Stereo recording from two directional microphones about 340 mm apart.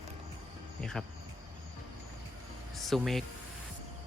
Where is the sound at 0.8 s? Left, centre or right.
Centre.